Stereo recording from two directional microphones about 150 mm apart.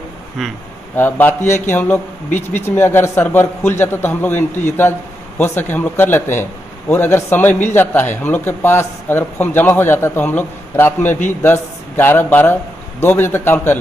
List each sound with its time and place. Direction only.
0.4 s speech: centre (ahead or behind)
0.9 s a man's voice: 15° left (ahead or behind)